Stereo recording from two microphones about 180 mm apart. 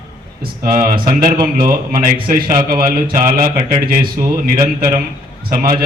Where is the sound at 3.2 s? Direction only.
20° right (ahead or behind).